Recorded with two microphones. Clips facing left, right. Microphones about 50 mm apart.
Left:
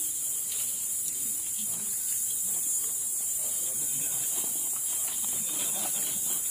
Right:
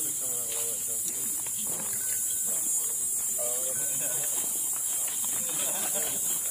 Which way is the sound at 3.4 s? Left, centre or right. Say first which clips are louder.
Right 11 dB; right.